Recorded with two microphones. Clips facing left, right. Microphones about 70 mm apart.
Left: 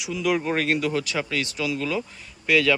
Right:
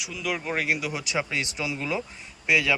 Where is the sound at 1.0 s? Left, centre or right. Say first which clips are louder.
Left 2 dB; centre.